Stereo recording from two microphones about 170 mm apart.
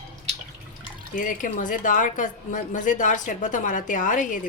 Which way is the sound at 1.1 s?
50° left (ahead or behind).